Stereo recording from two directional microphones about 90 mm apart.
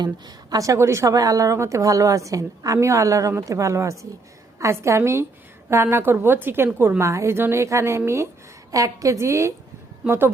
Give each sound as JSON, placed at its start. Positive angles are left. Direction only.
{"t": 0.0, "sound": "a woman's voice", "side_deg": -45}